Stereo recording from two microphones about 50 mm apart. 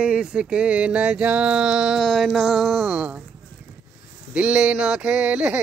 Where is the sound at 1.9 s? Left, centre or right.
Centre.